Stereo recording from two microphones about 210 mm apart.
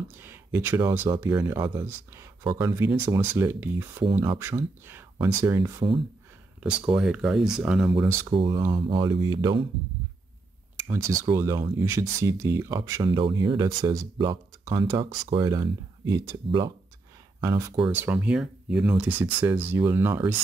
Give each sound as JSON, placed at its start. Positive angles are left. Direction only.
{"t": 0.2, "sound": "speech", "side_deg": -10}
{"t": 6.6, "sound": "speech", "side_deg": -5}
{"t": 8.3, "sound": "speech", "side_deg": -25}
{"t": 10.8, "sound": "speech", "side_deg": -15}